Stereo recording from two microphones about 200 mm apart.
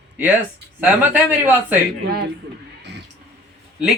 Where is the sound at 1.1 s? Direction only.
10° right (ahead or behind).